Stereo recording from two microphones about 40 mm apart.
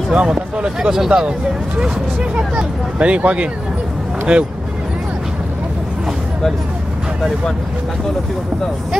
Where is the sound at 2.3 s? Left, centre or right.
Right.